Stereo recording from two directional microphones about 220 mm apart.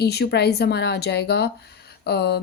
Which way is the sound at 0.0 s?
45° left (ahead or behind).